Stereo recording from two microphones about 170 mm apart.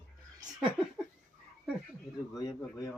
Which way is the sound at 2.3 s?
20° left (ahead or behind).